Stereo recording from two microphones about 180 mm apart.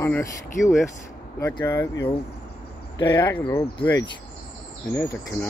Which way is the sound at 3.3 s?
15° left (ahead or behind).